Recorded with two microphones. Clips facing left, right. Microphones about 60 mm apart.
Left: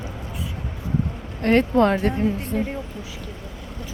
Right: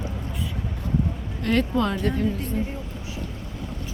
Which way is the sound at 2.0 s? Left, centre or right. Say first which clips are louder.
Left 2 dB; left.